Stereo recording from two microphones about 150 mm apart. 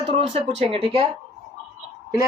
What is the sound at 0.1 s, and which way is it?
Speech, 40° right (ahead or behind).